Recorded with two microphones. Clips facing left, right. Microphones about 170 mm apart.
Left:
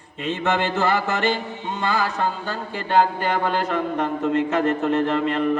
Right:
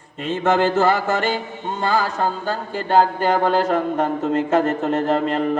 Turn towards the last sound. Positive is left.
turn(degrees=-40)  # may be behind; listen again after turning